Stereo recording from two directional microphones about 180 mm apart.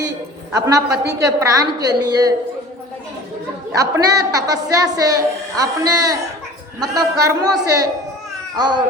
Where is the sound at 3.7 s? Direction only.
20° right (ahead or behind).